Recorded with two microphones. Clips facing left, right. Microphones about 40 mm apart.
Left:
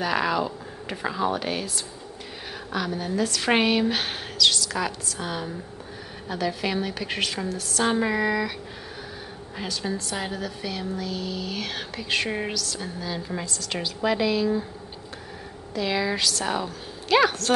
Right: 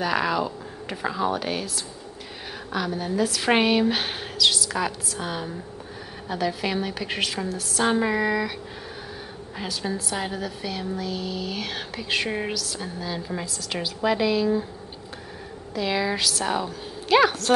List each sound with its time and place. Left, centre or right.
0.0 s a woman's voice: centre
2.7 s a woman's voice: centre
9.6 s a woman's voice: centre
15.7 s a woman's voice: centre